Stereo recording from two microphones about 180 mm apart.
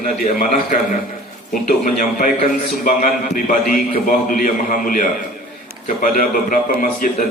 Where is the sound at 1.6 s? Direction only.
50° left (ahead or behind).